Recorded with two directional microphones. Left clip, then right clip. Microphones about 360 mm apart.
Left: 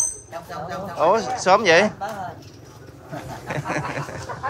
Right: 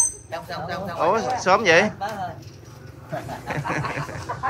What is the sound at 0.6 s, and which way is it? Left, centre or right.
Speech, centre.